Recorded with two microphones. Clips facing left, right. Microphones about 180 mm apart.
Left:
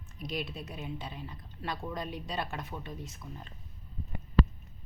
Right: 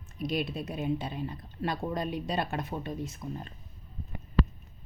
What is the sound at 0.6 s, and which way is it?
Speech, 50° right (ahead or behind).